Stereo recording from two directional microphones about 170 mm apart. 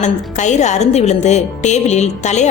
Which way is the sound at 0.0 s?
45° left (ahead or behind).